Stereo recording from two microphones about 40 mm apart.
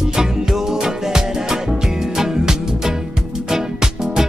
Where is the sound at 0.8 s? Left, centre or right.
Centre.